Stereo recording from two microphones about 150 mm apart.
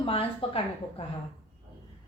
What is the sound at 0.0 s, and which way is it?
A woman's voice, 40° left (ahead or behind).